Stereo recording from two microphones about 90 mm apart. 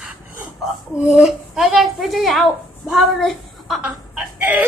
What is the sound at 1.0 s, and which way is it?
A child's voice, 5° right (ahead or behind).